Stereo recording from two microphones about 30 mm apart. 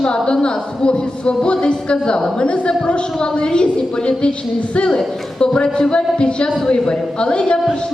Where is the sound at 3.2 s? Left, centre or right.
Left.